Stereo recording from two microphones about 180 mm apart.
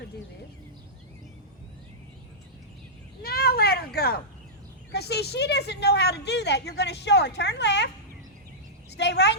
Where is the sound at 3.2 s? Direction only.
60° left (ahead or behind); by 7.8 s 75° left (ahead or behind).